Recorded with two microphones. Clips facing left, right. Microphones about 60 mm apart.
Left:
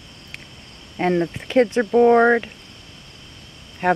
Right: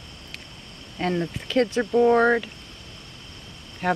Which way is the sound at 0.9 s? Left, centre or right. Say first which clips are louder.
Left 6 dB; left.